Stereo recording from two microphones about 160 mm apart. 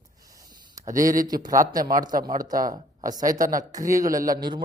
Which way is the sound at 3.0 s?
25° right (ahead or behind).